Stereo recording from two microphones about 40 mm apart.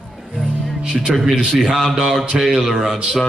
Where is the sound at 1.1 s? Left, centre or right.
Centre.